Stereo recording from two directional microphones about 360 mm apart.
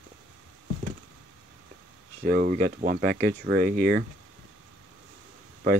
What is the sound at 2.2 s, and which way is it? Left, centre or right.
Speech, right.